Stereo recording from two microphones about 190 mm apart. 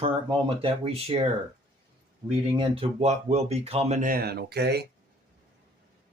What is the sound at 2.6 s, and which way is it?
Speech, 30° right (ahead or behind).